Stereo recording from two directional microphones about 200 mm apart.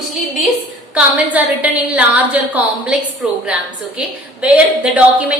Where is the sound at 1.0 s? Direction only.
5° right (ahead or behind).